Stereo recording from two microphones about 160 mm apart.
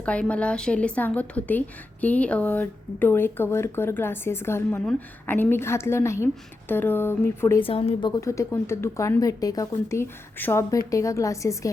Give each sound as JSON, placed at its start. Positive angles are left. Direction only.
{"t": 0.0, "sound": "a woman's voice", "side_deg": 10}
{"t": 7.6, "sound": "a woman's voice", "side_deg": 35}
{"t": 8.1, "sound": "speech", "side_deg": 20}